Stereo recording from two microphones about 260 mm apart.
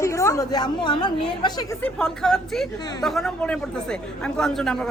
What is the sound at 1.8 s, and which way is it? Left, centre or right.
Speech, centre.